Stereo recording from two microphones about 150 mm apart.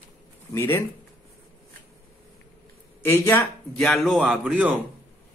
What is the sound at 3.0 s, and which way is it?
Speech, 15° left (ahead or behind).